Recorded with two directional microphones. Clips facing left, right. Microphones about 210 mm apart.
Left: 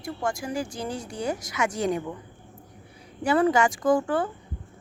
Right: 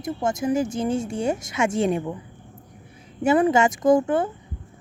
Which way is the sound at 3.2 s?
25° right (ahead or behind).